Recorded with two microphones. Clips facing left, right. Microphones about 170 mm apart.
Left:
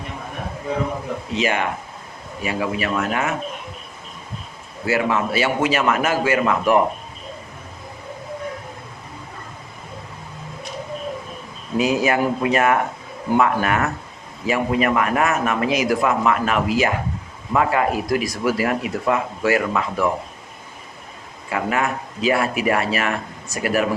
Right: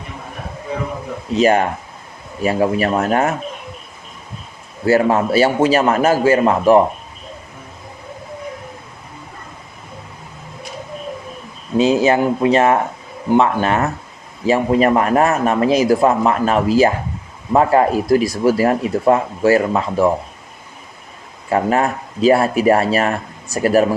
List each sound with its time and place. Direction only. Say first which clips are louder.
1.4 s speech: right 9 dB; 40° right (ahead or behind)
4.9 s speech: right 6 dB; 40° right (ahead or behind)
11.8 s speech: right 5 dB; 25° right (ahead or behind)
21.5 s speech: right 6 dB; 35° right (ahead or behind)